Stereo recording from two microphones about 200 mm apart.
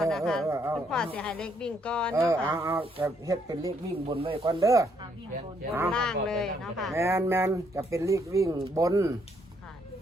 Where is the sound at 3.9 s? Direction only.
30° right (ahead or behind).